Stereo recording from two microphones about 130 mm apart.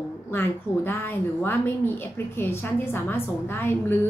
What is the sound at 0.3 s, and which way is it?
A woman's voice, 15° left (ahead or behind).